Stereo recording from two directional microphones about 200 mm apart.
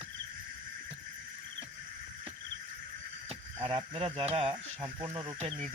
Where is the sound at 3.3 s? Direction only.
25° right (ahead or behind).